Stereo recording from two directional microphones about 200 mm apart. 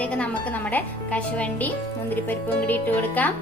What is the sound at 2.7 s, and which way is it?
Speech, 10° left (ahead or behind).